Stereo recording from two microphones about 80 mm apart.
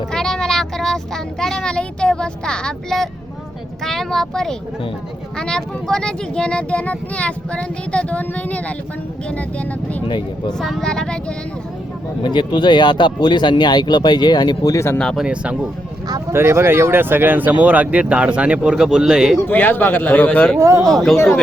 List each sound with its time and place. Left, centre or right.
0.1 s speech: centre
10.1 s speech: left
10.6 s speech: centre
12.2 s speech: left
15.1 s speech: centre
16.3 s speech: right; by 19.4 s centre
19.5 s a man's voice: left
20.6 s speech: right
20.9 s speech: centre